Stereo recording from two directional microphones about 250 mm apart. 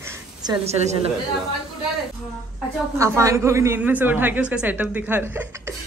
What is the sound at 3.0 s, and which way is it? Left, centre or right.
A woman's voice, centre.